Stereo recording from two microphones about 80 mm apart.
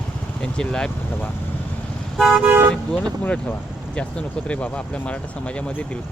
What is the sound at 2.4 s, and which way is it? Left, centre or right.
Speech, right.